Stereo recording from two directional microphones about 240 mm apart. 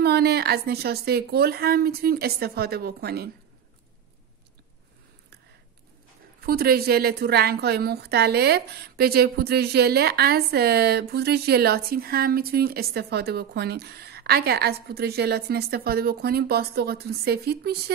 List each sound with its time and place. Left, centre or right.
0.0 s a woman's voice: right
6.4 s a woman's voice: right